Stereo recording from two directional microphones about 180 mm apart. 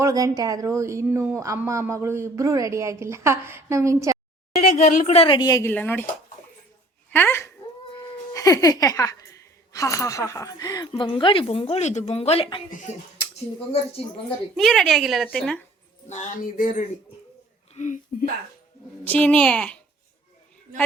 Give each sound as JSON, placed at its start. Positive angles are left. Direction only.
{"t": 0.0, "sound": "speech", "side_deg": -20}
{"t": 4.9, "sound": "speech", "side_deg": 50}
{"t": 5.1, "sound": "speech", "side_deg": 30}
{"t": 7.1, "sound": "speech", "side_deg": 10}
{"t": 12.7, "sound": "speech", "side_deg": 45}
{"t": 14.3, "sound": "a woman's voice", "side_deg": 0}
{"t": 16.0, "sound": "speech", "side_deg": 40}
{"t": 19.0, "sound": "a child's voice", "side_deg": 10}